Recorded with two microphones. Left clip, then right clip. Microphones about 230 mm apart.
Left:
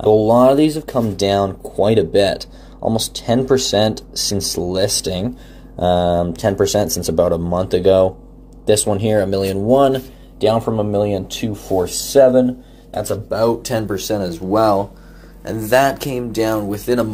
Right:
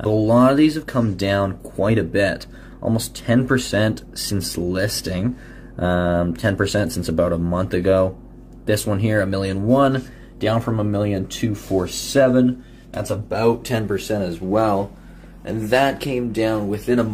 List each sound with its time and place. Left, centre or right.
0.1 s speech: centre